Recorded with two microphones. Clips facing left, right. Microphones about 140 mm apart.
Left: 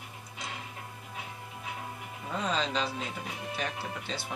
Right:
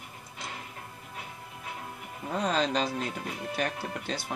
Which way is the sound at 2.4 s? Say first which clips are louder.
Right 3 dB; 45° right (ahead or behind).